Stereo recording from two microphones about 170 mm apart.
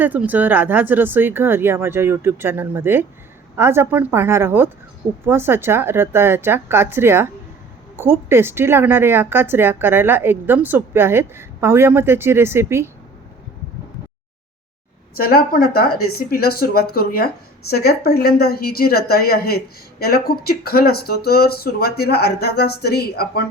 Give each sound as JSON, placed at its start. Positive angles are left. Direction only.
{"t": 0.0, "sound": "speech", "side_deg": -10}
{"t": 15.1, "sound": "a woman's voice", "side_deg": 60}